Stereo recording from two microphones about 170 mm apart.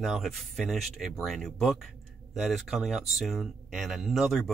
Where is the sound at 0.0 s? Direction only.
Centre (ahead or behind).